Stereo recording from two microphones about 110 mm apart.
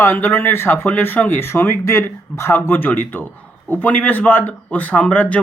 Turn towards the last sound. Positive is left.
turn(degrees=15)  # may be behind; listen again after turning